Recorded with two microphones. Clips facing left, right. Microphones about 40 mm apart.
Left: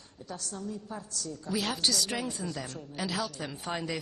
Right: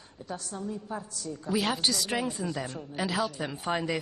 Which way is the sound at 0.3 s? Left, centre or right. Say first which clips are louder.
Right 3 dB; right.